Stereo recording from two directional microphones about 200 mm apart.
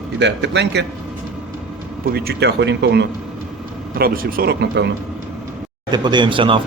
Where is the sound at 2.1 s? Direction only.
55° right (ahead or behind).